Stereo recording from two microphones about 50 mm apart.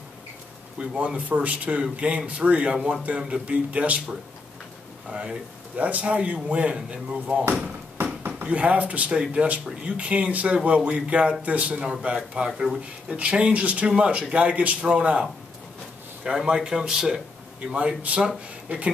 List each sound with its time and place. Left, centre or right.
0.7 s a man's voice: right
5.8 s a man's voice: right
7.6 s a sound: right
8.3 s speech: right
9.1 s a man's voice: centre
12.4 s speech: centre
13.1 s a man's voice: right
16.3 s speech: centre
17.7 s a man's voice: right